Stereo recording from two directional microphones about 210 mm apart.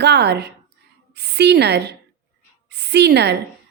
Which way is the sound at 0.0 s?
55° right (ahead or behind).